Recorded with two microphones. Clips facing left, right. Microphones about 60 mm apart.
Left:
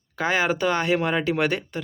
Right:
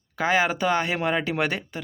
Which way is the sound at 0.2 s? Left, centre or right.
Centre.